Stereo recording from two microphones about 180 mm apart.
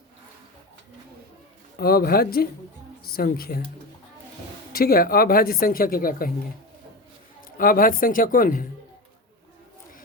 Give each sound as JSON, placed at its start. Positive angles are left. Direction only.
{"t": 1.8, "sound": "a woman's voice", "side_deg": 60}
{"t": 4.7, "sound": "speech", "side_deg": 55}
{"t": 7.6, "sound": "speech", "side_deg": 50}